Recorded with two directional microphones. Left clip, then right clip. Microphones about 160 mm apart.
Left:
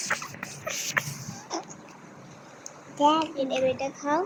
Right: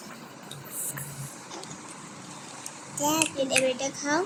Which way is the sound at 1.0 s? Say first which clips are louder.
Left 14 dB; 70° left (ahead or behind).